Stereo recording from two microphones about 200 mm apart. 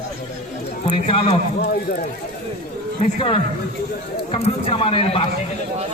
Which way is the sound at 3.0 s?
30° left (ahead or behind).